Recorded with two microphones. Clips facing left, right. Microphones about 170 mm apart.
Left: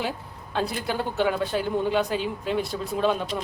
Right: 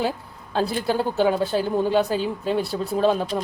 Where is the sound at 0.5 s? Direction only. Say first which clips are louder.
Right 5 dB; 35° right (ahead or behind).